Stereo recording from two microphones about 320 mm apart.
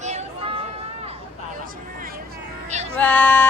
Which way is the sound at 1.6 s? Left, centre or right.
Right.